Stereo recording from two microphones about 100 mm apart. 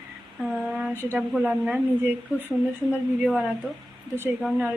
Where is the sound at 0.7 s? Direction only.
5° right (ahead or behind).